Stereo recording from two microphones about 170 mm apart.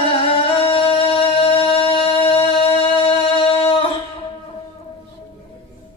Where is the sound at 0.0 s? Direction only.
35° left (ahead or behind).